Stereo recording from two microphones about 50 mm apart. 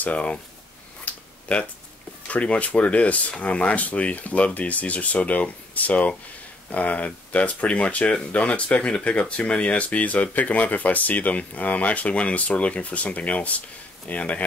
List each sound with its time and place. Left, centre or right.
0.0 s speech: left
1.0 s a sound: left
2.2 s speech: left